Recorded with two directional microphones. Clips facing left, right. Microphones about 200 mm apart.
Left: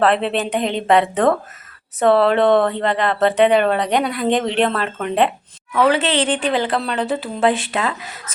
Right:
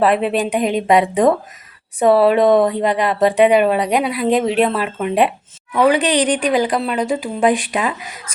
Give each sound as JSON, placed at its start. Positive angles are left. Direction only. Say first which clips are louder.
{"t": 0.0, "sound": "speech", "louder": "right 2 dB", "side_deg": -10}